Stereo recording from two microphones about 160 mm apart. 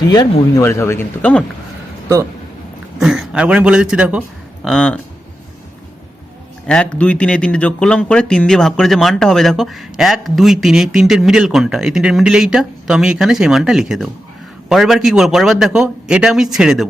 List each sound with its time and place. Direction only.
0.1 s speech: 20° left (ahead or behind)
3.0 s a man's voice: centre (ahead or behind)
4.6 s speech: 5° left (ahead or behind)
6.7 s speech: 5° left (ahead or behind)